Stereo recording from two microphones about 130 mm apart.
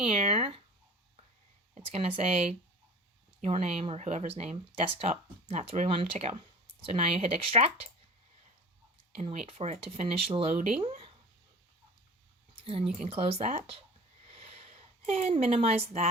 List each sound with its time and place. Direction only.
0.0 s speech: 55° right (ahead or behind)
1.7 s speech: 50° right (ahead or behind)
5.9 s speech: 45° right (ahead or behind)
9.1 s speech: 55° right (ahead or behind)
13.0 s speech: 50° right (ahead or behind)
14.3 s a sound: 50° right (ahead or behind)